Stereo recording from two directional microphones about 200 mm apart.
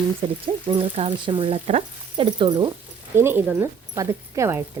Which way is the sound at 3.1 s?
10° right (ahead or behind).